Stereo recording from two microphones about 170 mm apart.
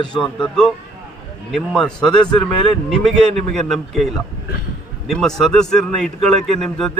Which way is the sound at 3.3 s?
Centre (ahead or behind).